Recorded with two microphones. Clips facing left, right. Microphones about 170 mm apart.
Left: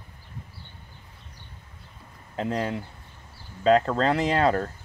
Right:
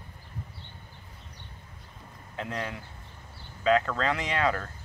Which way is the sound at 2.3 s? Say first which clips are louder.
Left 7 dB; 35° left (ahead or behind).